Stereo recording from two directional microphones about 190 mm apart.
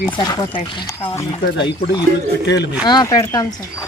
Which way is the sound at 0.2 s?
20° left (ahead or behind).